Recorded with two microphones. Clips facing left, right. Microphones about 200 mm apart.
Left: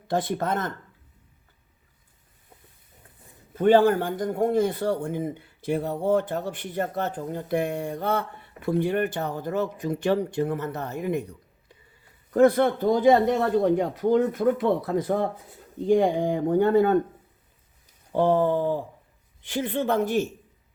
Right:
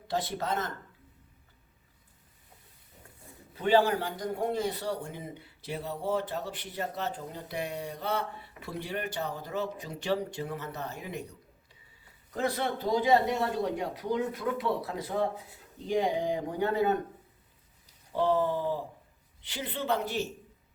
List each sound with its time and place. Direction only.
0.1 s a man's voice: 50° left (ahead or behind)
3.5 s a man's voice: 50° left (ahead or behind)
12.3 s a man's voice: 55° left (ahead or behind)
18.1 s a man's voice: 50° left (ahead or behind)